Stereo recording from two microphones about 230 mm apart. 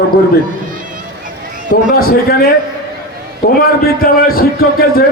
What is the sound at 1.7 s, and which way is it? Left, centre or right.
Speech, left.